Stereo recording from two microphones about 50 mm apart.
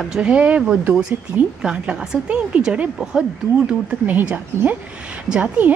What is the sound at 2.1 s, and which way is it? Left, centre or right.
Speech, right.